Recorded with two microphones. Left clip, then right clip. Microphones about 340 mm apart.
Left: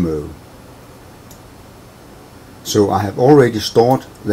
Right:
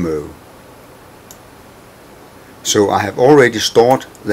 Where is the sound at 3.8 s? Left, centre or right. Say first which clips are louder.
Right 2 dB; left.